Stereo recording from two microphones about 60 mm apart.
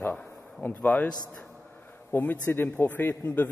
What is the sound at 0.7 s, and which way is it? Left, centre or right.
Speech, left.